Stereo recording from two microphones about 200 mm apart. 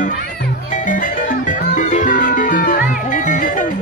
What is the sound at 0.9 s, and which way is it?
Music, 40° left (ahead or behind).